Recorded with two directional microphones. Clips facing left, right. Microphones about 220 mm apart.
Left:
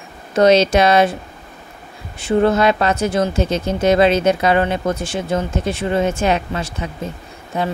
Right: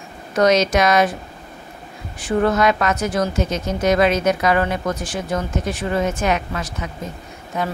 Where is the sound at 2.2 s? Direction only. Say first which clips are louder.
Left 3 dB; 25° left (ahead or behind).